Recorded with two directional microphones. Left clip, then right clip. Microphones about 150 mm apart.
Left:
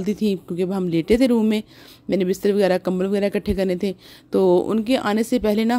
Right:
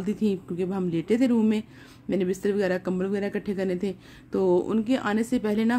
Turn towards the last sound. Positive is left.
turn(degrees=45)  # may be behind; listen again after turning